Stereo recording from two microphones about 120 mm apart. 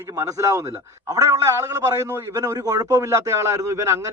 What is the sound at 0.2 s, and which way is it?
A man's voice, 25° right (ahead or behind).